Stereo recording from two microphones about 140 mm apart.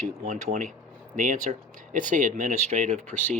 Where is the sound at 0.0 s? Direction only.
65° right (ahead or behind).